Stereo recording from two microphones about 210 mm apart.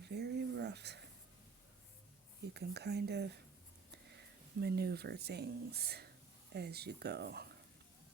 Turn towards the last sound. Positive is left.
turn(degrees=-50)  # may be behind; listen again after turning